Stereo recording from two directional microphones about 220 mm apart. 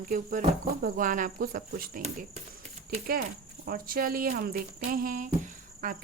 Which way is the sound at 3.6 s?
40° right (ahead or behind).